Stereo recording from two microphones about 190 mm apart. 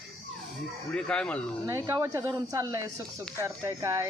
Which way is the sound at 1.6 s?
15° right (ahead or behind).